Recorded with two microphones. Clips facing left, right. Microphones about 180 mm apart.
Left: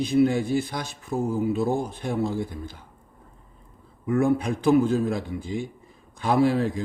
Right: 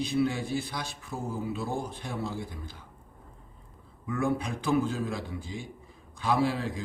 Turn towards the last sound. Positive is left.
turn(degrees=50)  # may be behind; listen again after turning